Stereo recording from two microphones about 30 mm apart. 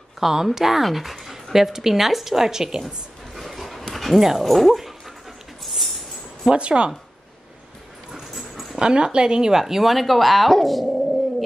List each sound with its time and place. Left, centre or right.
0.2 s speech: centre
3.3 s a sound: centre
3.9 s speech: centre
5.6 s a sound: centre
6.5 s speech: right
8.1 s dog: centre
8.7 s speech: right
9.5 s speech: centre